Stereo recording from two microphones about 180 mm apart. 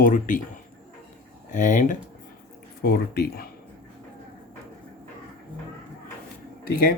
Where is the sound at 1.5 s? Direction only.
45° left (ahead or behind).